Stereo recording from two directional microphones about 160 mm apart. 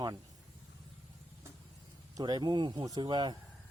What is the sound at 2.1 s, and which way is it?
Speech, 25° right (ahead or behind).